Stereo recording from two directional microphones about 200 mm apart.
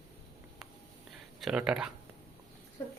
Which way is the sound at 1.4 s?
5° right (ahead or behind).